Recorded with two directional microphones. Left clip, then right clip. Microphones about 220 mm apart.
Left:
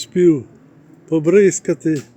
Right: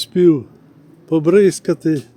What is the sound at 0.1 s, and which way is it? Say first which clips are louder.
A man's voice: even; 10° right (ahead or behind).